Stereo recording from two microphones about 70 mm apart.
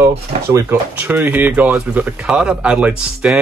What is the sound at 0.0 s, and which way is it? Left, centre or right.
Speech, right.